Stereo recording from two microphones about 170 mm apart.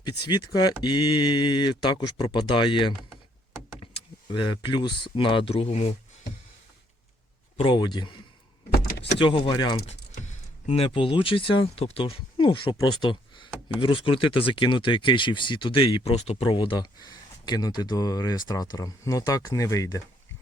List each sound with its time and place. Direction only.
0.3 s speech: 25° left (ahead or behind)
3.9 s speech: 30° left (ahead or behind)
7.5 s speech: 30° left (ahead or behind)
8.9 s vehicle: 90° left
9.1 s speech: 30° left (ahead or behind)
10.2 s speech: 40° left (ahead or behind); by 20.0 s 20° left (ahead or behind)